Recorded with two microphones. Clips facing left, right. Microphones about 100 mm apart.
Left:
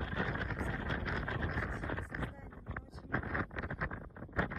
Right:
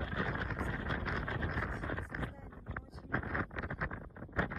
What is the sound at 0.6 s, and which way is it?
Wind noise, 25° left (ahead or behind).